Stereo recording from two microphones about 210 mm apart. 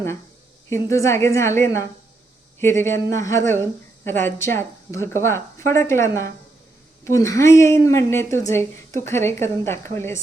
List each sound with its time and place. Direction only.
0.7 s a woman's voice: 15° left (ahead or behind)